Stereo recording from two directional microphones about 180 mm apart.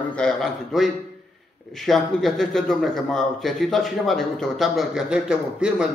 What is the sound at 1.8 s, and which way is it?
A man's voice, centre (ahead or behind).